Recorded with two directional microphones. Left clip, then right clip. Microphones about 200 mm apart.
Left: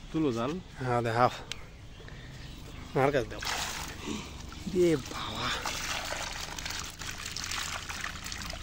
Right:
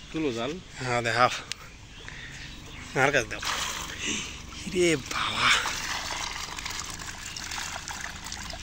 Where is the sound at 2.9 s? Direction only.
20° left (ahead or behind).